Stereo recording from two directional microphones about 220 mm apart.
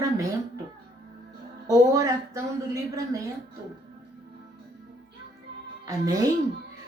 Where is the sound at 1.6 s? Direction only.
15° right (ahead or behind).